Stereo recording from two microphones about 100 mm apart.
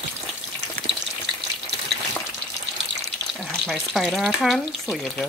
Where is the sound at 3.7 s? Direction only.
Centre (ahead or behind).